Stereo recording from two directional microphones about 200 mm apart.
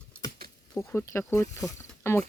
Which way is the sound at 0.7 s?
10° left (ahead or behind).